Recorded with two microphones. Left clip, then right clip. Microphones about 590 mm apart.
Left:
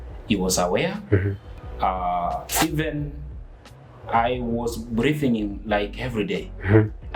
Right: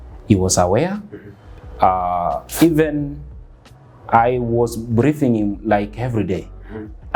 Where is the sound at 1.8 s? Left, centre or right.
Right.